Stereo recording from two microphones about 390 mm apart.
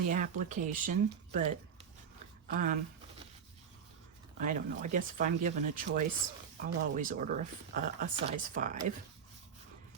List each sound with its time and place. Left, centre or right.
0.1 s speech: centre
2.5 s speech: centre
4.4 s speech: centre